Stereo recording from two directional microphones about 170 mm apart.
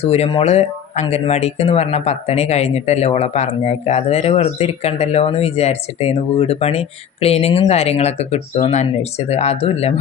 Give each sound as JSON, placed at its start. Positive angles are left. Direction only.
{"t": 0.0, "sound": "speech", "side_deg": 35}